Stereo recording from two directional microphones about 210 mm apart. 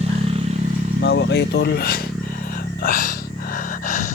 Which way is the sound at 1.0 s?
55° left (ahead or behind).